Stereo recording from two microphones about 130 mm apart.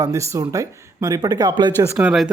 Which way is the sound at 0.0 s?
25° right (ahead or behind).